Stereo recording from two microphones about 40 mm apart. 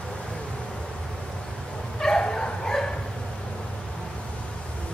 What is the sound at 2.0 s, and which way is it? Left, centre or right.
Dog, centre.